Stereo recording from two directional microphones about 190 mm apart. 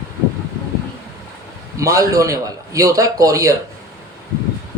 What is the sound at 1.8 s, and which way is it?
A man's voice, 15° right (ahead or behind).